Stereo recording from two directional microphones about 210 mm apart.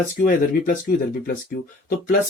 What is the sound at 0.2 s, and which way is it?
Speech, 40° left (ahead or behind).